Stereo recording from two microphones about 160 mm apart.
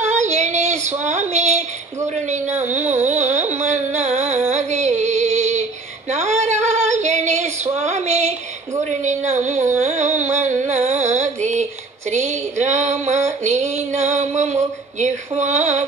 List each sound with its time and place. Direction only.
0.0 s female singing: 45° right (ahead or behind)
2.2 s speech: 45° right (ahead or behind)
3.5 s music: 45° right (ahead or behind)
4.5 s female singing: 45° right (ahead or behind)
9.0 s a sound: 45° right (ahead or behind)
9.8 s music: 45° right (ahead or behind)
12.1 s female singing: 45° right (ahead or behind)
13.4 s a sound: 45° right (ahead or behind)